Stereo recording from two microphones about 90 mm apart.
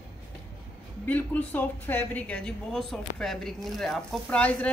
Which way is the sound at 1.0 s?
20° left (ahead or behind).